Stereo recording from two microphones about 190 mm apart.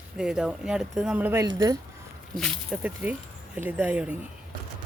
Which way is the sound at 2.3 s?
Centre (ahead or behind).